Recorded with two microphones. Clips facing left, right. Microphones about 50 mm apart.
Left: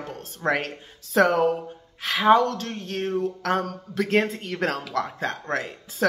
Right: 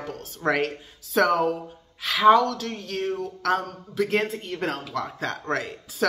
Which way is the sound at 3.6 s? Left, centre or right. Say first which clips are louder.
Even; left.